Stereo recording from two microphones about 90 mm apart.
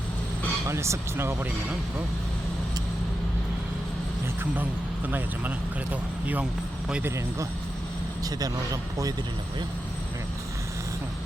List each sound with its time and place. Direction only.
0.7 s speech: 30° right (ahead or behind)
4.5 s speech: 20° right (ahead or behind)
8.2 s speech: 40° right (ahead or behind)